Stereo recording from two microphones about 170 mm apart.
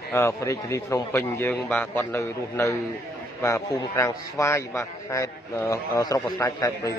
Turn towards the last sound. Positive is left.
turn(degrees=20)  # may be behind; listen again after turning